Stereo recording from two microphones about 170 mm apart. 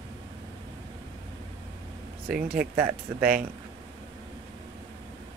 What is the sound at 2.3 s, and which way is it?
Speech, 60° right (ahead or behind).